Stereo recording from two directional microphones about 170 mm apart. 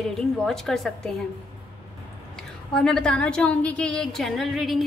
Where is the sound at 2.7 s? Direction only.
5° left (ahead or behind).